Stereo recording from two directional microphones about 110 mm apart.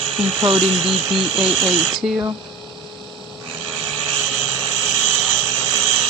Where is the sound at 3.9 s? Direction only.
5° left (ahead or behind).